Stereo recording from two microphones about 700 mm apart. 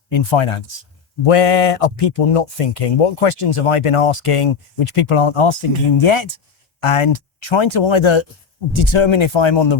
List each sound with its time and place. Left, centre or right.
0.1 s speech: left